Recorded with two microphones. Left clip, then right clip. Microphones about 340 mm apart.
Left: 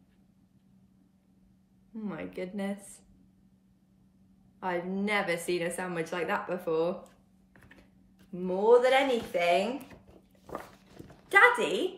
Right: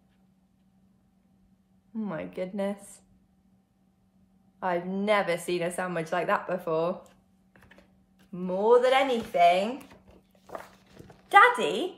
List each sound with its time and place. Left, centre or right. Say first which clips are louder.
2.0 s a woman's voice: right 4 dB; centre
4.6 s a woman's voice: right 3 dB; centre
8.4 s a woman's voice: right 1 dB; centre
11.2 s a woman's voice: right 3 dB; centre